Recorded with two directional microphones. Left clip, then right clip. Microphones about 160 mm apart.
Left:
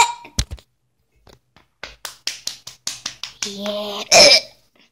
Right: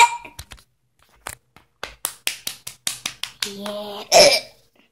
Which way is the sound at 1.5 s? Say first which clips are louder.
Right 1 dB; 40° right (ahead or behind).